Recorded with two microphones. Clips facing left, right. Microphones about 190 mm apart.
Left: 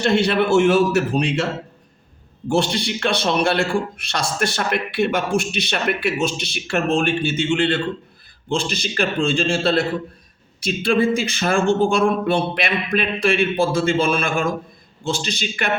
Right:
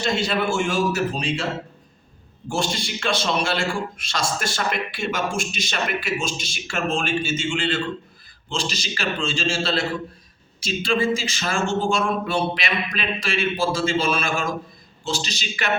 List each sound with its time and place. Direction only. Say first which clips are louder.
0.0 s a man's voice: left 5 dB; 60° left (ahead or behind)
2.5 s a man's voice: left 6 dB; 60° left (ahead or behind)